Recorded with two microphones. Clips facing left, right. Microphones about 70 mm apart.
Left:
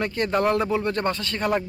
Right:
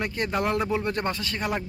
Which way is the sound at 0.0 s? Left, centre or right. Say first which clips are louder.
Left 4 dB; centre.